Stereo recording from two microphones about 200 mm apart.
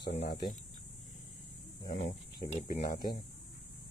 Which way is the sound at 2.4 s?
40° left (ahead or behind).